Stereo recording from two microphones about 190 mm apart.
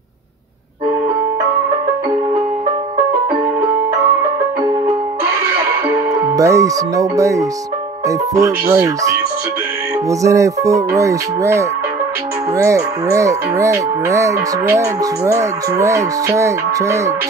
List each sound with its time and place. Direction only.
6.1 s speech: 15° right (ahead or behind)
8.4 s cattle: 15° right (ahead or behind)